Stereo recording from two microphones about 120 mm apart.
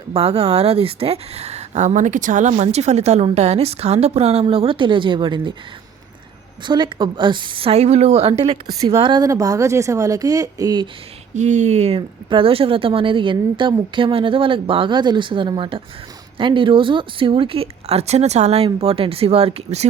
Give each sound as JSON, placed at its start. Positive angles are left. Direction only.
{"t": 0.1, "sound": "speech", "side_deg": -55}
{"t": 6.7, "sound": "speech", "side_deg": -40}
{"t": 8.6, "sound": "speech", "side_deg": -30}
{"t": 9.0, "sound": "speech", "side_deg": -45}
{"t": 9.2, "sound": "speech", "side_deg": -30}
{"t": 11.3, "sound": "speech", "side_deg": -80}